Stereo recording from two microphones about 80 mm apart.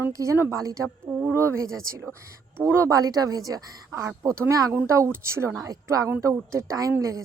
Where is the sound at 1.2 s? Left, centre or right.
Right.